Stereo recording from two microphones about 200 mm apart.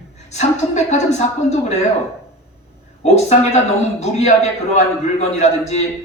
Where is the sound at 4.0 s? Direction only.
35° left (ahead or behind).